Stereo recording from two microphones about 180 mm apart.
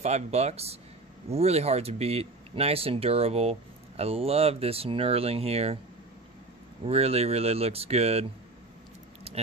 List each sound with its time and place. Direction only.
0.0 s speech: 35° right (ahead or behind)
6.8 s speech: 35° right (ahead or behind)
9.3 s keys jangling: 35° right (ahead or behind)